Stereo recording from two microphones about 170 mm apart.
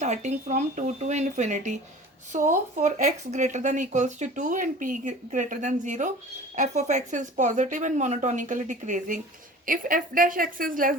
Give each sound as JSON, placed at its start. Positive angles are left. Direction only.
{"t": 0.0, "sound": "speech", "side_deg": -40}